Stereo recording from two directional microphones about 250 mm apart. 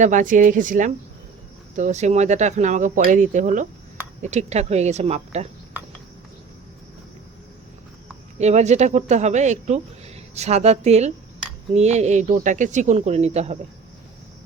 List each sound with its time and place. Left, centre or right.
0.0 s speech: right
8.4 s speech: right